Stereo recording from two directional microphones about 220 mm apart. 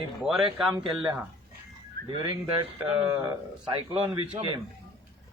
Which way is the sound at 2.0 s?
40° right (ahead or behind).